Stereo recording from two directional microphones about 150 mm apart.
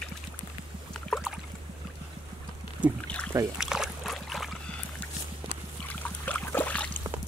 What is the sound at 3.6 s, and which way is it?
Boat, 5° right (ahead or behind).